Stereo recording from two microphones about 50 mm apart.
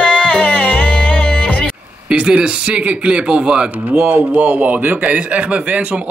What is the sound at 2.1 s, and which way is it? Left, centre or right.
Speech, right.